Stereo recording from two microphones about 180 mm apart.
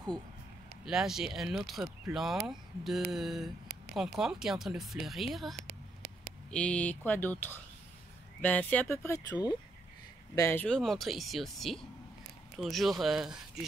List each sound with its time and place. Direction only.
0.8 s speech: centre (ahead or behind)
5.6 s a sound: 60° right (ahead or behind)
6.5 s speech: 5° left (ahead or behind)